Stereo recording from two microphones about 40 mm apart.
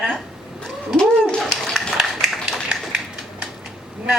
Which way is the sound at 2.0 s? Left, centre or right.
Centre.